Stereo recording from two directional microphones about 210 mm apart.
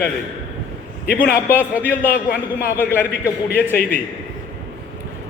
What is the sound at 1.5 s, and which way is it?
Speech, 10° right (ahead or behind).